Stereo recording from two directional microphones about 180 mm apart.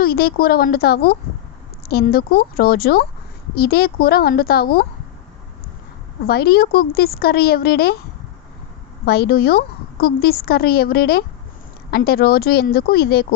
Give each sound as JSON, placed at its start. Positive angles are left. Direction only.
{"t": 0.0, "sound": "a woman's voice", "side_deg": 55}
{"t": 6.2, "sound": "a woman's voice", "side_deg": 60}
{"t": 9.0, "sound": "a woman's voice", "side_deg": 60}